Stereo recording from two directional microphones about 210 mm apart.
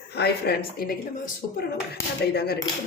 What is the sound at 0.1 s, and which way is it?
Speech, 50° left (ahead or behind).